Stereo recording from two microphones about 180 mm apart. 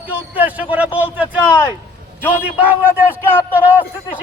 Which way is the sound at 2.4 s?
10° right (ahead or behind).